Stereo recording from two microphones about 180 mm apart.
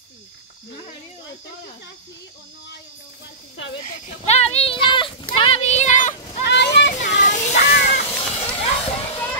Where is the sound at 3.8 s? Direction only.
40° left (ahead or behind).